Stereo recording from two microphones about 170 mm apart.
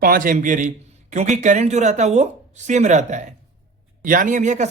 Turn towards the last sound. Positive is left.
turn(degrees=-45)  # may be behind; listen again after turning